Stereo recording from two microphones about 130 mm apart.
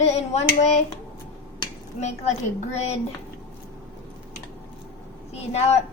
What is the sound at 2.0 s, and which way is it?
Speech, 60° left (ahead or behind).